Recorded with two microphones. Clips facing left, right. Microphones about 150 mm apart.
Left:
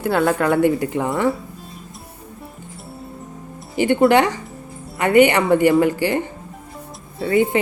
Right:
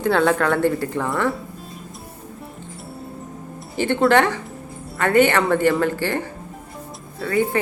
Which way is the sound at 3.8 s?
15° left (ahead or behind).